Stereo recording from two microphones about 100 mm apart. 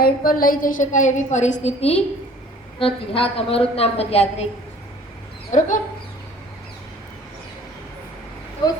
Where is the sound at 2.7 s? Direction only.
65° left (ahead or behind); by 4.4 s 90° left.